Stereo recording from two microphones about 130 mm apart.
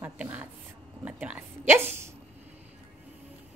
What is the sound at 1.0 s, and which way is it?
Whispering, 10° right (ahead or behind).